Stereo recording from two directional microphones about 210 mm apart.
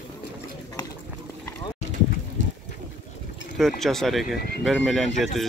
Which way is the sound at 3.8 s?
Centre (ahead or behind).